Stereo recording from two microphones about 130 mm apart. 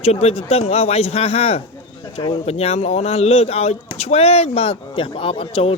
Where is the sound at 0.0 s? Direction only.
50° left (ahead or behind).